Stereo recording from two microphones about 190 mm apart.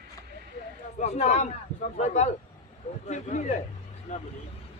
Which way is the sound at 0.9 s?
35° left (ahead or behind).